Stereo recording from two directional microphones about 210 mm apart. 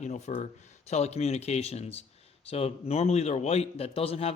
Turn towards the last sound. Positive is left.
turn(degrees=30)  # may be behind; listen again after turning